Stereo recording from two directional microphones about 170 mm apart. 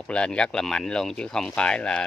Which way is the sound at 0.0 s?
5° left (ahead or behind).